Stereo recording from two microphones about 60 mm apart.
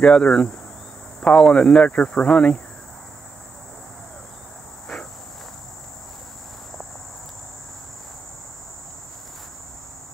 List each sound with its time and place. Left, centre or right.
0.0 s speech: centre